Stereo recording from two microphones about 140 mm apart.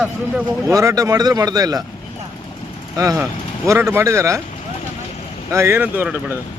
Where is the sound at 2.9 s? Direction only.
25° right (ahead or behind).